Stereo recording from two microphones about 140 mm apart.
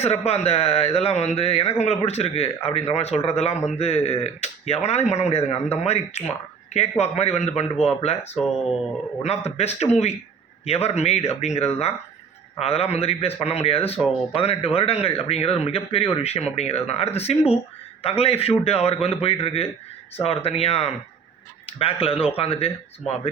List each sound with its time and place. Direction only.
0.3 s speech: 50° left (ahead or behind)